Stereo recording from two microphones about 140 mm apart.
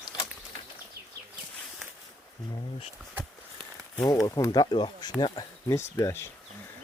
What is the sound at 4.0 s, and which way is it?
Speech, 25° left (ahead or behind).